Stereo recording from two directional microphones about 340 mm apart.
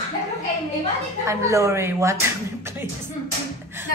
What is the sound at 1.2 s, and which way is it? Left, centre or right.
Speech, centre.